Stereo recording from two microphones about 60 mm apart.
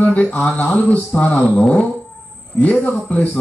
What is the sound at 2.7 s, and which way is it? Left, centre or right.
Speech, left.